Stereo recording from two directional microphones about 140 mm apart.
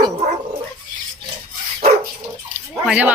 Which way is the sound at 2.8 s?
10° right (ahead or behind).